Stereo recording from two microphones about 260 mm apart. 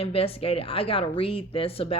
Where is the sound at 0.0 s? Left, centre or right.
Left.